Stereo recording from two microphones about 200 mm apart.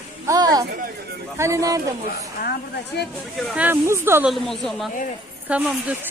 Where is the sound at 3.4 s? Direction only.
10° right (ahead or behind).